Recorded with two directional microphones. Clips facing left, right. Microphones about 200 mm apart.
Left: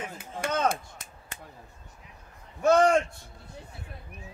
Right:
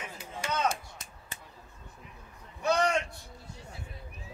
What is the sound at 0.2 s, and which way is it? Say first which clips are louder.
Chop: left 3 dB; 50° left (ahead or behind).